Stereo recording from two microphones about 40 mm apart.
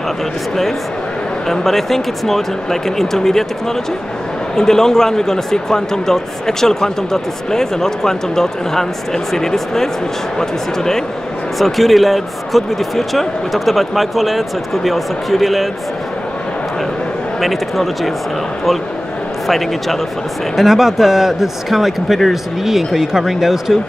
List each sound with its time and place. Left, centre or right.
1.5 s speech: centre
11.5 s speech: centre
17.4 s speech: centre
19.4 s a man's voice: centre